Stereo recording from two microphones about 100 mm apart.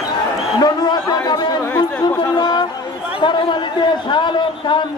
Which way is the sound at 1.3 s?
45° left (ahead or behind).